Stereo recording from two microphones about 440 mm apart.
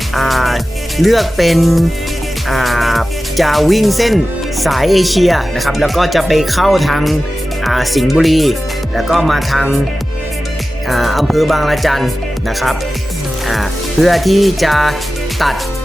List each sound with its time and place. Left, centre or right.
0.1 s speech: centre
10.8 s speech: centre